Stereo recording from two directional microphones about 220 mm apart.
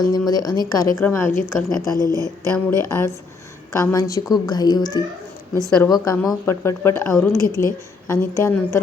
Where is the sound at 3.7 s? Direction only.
15° left (ahead or behind).